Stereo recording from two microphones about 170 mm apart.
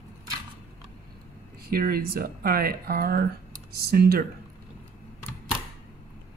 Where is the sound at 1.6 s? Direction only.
60° right (ahead or behind).